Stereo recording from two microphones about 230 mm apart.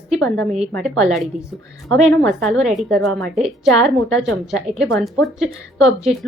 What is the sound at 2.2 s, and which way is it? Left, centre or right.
Speech, centre.